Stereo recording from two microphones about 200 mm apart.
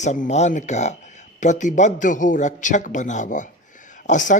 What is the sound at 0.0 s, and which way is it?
A man's voice, 35° left (ahead or behind).